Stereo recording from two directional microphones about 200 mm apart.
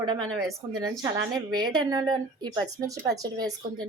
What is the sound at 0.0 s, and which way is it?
Speech, 20° right (ahead or behind).